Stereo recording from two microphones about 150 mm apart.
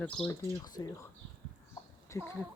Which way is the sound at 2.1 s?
15° left (ahead or behind).